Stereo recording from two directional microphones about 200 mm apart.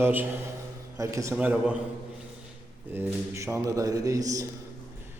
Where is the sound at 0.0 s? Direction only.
10° right (ahead or behind).